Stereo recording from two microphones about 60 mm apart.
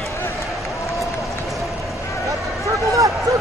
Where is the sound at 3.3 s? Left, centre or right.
Right.